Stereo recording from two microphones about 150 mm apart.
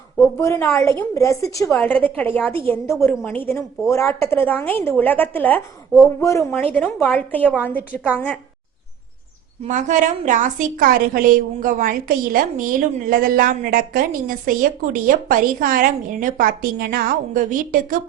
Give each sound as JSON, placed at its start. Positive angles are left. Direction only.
{"t": 0.4, "sound": "a woman's voice", "side_deg": 20}
{"t": 1.7, "sound": "a woman's voice", "side_deg": 10}
{"t": 6.7, "sound": "a woman's voice", "side_deg": 10}
{"t": 9.6, "sound": "a woman's voice", "side_deg": -55}